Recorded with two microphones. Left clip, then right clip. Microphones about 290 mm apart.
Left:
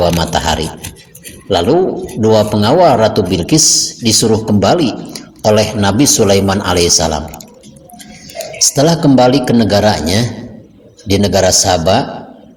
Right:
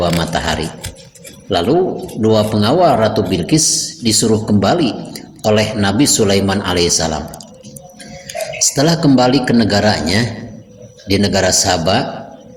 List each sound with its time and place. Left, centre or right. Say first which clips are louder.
0.0 s speech: left 4 dB; centre
8.7 s speech: left 3 dB; centre